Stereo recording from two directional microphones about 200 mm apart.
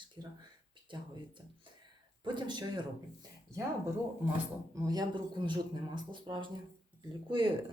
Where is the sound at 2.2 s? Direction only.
20° right (ahead or behind).